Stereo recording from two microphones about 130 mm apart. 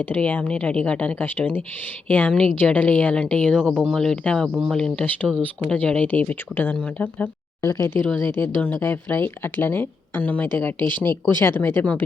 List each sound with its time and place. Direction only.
0.0 s a woman's voice: 10° left (ahead or behind)
4.4 s speech: 10° right (ahead or behind)
4.7 s a woman's voice: 5° left (ahead or behind)
7.7 s a woman's voice: 20° left (ahead or behind)